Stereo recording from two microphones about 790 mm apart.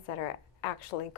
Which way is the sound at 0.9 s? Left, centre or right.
Left.